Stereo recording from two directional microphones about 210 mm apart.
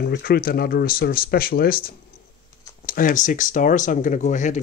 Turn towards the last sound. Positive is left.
turn(degrees=35)  # may be behind; listen again after turning